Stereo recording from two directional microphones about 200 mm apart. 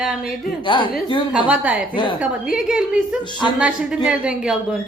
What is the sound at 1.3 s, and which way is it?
A woman's voice, 5° right (ahead or behind).